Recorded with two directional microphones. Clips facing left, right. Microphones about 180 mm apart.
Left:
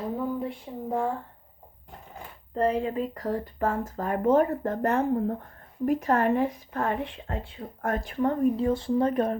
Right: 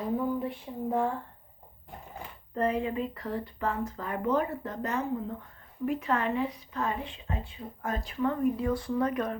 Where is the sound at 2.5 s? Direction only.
35° left (ahead or behind).